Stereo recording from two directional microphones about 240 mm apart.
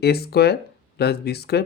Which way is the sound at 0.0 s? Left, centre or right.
Left.